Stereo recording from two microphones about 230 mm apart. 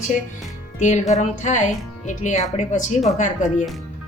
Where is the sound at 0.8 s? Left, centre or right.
Left.